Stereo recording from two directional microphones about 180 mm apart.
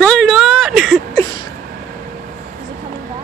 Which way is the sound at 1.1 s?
20° left (ahead or behind).